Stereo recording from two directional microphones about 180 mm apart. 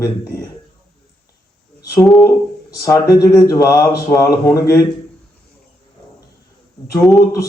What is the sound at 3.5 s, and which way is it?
A man's voice, 15° left (ahead or behind).